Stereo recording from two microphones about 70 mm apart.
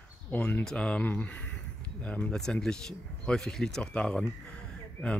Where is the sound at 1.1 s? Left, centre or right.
Left.